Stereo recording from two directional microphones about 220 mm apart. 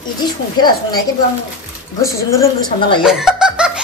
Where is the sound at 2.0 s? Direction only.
15° left (ahead or behind).